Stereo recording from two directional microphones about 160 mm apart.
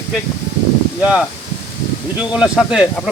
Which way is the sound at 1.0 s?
5° right (ahead or behind).